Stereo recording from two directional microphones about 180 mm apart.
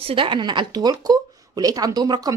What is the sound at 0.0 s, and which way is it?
Speech, 30° right (ahead or behind).